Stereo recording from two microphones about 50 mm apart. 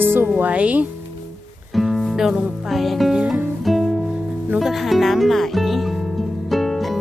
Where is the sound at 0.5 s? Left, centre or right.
Right.